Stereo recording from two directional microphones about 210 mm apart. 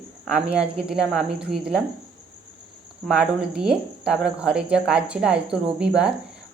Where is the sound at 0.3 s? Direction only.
5° right (ahead or behind).